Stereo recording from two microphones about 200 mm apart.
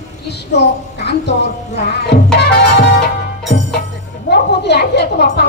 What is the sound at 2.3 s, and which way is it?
Music, 60° left (ahead or behind).